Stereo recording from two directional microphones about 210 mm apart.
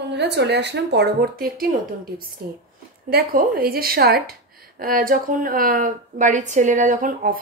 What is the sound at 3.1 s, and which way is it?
A woman's voice, 45° right (ahead or behind).